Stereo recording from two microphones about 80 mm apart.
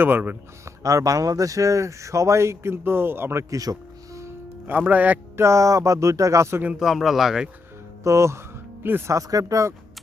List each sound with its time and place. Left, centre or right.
0.0 s speech: right
0.6 s speech: right
3.5 s music: right; by 5.2 s centre
5.4 s speech: right
6.7 s speech: centre
8.0 s speech: right
9.1 s speech: right